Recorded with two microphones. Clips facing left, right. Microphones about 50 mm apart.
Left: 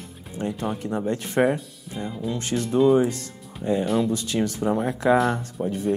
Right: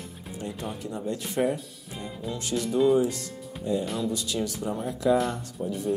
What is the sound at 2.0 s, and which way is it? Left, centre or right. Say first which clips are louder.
Speech: left 6 dB; centre.